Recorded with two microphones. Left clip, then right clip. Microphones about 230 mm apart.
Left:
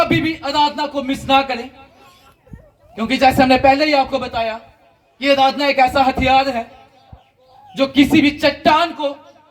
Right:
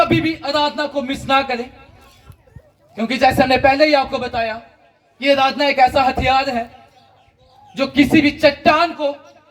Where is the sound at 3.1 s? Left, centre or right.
Left.